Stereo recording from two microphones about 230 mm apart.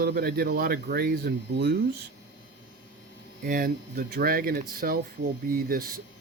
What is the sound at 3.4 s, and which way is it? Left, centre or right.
Speech, right.